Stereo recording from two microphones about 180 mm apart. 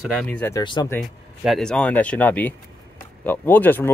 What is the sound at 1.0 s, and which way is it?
Speech, centre (ahead or behind).